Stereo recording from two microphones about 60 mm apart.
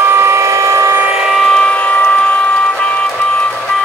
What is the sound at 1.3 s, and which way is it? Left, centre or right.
Vehicle, centre.